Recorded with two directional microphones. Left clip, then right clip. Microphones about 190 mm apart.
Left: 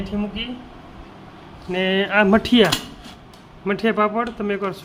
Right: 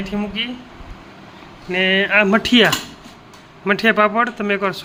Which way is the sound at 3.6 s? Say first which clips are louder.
Right 5 dB; centre (ahead or behind).